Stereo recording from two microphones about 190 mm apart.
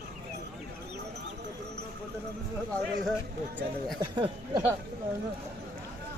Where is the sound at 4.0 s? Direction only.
25° right (ahead or behind).